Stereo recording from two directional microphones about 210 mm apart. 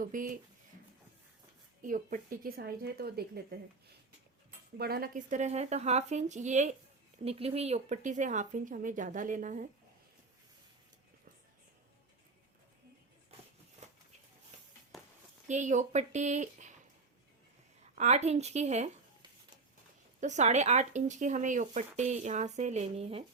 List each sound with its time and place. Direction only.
0.0 s speech: 40° right (ahead or behind)
1.8 s a woman's voice: 40° right (ahead or behind)
4.8 s speech: 45° right (ahead or behind)
13.8 s a sound: 35° right (ahead or behind)
14.9 s a sound: centre (ahead or behind)
15.4 s speech: 35° right (ahead or behind)
17.9 s speech: 35° right (ahead or behind)
20.2 s speech: 35° right (ahead or behind)